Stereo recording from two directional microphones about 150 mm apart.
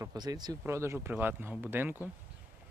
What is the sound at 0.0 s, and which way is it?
Speech, 25° right (ahead or behind).